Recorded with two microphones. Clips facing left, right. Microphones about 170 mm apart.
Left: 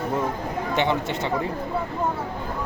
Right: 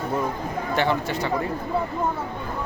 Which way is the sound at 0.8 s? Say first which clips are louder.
Right 1 dB; 20° left (ahead or behind).